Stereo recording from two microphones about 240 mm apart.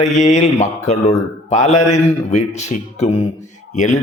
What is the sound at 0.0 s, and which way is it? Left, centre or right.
A man's voice, left.